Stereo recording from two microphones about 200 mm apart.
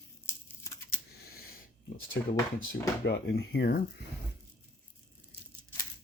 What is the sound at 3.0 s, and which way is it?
Speech, 55° left (ahead or behind).